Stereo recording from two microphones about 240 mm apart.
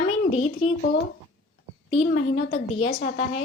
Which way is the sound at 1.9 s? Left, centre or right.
Left.